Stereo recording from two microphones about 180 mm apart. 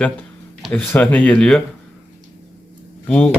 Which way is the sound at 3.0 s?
5° left (ahead or behind).